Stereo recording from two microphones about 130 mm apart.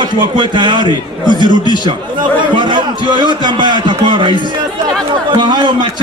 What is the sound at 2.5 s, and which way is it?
A man's voice, 35° right (ahead or behind).